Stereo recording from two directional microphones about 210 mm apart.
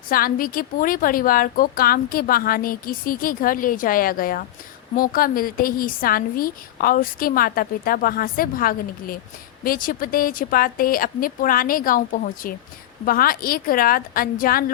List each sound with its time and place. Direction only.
0.1 s a woman's voice: 45° left (ahead or behind)